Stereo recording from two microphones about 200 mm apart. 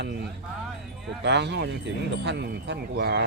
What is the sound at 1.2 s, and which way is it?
Speech, 60° right (ahead or behind).